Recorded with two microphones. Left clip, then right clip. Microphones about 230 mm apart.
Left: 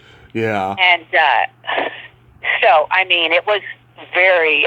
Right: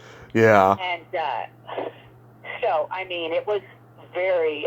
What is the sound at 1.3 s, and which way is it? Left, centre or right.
Speech, left.